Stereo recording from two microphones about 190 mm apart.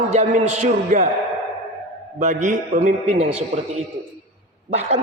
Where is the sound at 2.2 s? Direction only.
40° right (ahead or behind).